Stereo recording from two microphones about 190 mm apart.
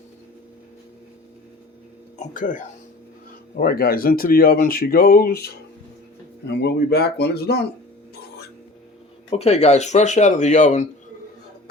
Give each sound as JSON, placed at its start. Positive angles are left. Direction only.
{"t": 2.1, "sound": "speech", "side_deg": 45}
{"t": 6.5, "sound": "speech", "side_deg": 60}
{"t": 9.3, "sound": "speech", "side_deg": 35}